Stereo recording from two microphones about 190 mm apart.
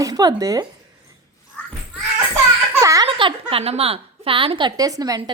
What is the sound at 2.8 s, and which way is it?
A woman's voice, 15° right (ahead or behind).